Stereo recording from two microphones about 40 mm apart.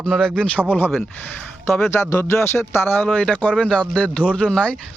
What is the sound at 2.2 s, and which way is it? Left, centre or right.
Speech, left.